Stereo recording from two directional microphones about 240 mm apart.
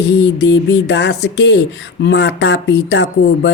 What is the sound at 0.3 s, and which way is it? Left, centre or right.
Speech, left.